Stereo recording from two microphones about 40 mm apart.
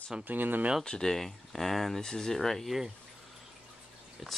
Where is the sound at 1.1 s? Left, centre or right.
Centre.